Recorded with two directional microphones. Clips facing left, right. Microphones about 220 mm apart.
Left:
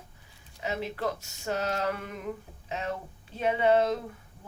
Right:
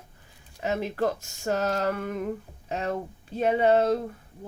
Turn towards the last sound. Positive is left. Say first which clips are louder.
# right 3 dB
turn(degrees=-40)  # may be behind; listen again after turning